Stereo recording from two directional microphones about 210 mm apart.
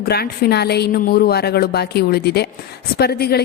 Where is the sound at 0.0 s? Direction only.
50° left (ahead or behind).